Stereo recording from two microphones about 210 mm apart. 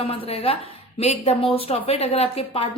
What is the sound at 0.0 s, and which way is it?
A woman's voice, 25° left (ahead or behind).